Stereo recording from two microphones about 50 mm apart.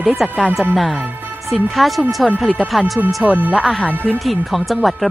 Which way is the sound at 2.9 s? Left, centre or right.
Right.